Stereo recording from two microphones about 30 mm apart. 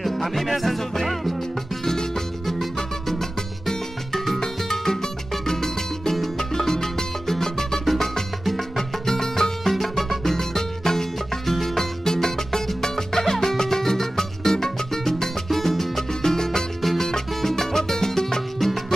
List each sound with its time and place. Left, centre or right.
0.0 s music: centre
1.9 s music: centre
9.0 s music: centre
9.7 s music: centre
16.1 s music: centre